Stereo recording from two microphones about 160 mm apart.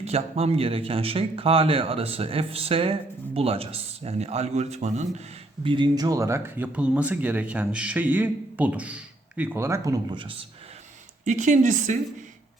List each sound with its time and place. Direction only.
0.0 s speech: 40° right (ahead or behind)
5.6 s speech: 30° right (ahead or behind)
11.3 s speech: 50° right (ahead or behind)